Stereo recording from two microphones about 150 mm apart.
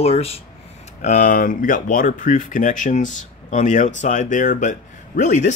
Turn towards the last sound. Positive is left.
turn(degrees=55)  # may be behind; listen again after turning